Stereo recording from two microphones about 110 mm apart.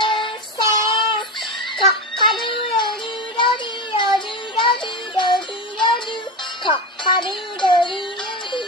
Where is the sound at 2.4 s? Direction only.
50° left (ahead or behind).